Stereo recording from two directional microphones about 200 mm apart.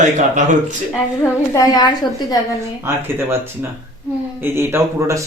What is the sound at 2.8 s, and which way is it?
A man's voice, 10° right (ahead or behind).